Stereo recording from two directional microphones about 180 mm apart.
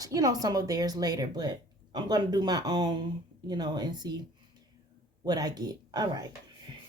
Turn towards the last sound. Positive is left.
turn(degrees=-20)  # may be behind; listen again after turning